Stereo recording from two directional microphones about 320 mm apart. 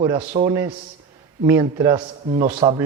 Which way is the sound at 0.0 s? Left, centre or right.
Centre.